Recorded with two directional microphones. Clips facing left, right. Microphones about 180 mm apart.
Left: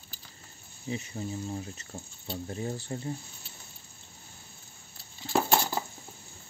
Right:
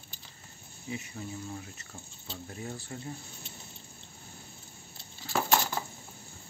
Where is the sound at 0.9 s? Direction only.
30° left (ahead or behind).